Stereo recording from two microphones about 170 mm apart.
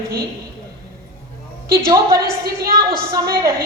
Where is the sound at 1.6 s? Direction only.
60° right (ahead or behind).